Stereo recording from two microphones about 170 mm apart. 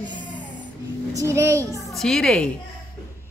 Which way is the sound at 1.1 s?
15° right (ahead or behind).